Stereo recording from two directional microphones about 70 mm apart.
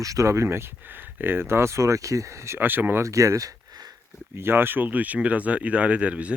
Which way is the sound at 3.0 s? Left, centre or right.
Right.